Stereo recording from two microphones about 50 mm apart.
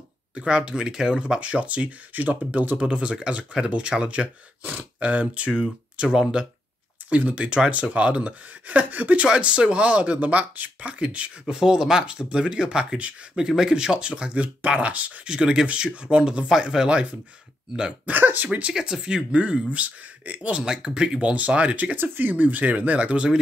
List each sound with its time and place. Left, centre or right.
0.3 s speech: right
2.8 s speech: right
7.1 s speech: right
15.2 s speech: centre
18.0 s speech: right
18.7 s speech: centre
21.9 s speech: right